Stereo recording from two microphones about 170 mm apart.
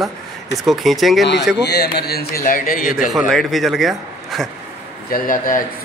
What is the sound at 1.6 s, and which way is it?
A man's voice, 75° left (ahead or behind).